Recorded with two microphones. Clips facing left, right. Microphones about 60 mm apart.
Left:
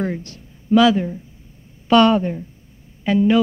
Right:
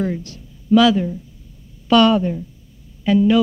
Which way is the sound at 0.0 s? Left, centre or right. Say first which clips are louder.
Right 1 dB; left.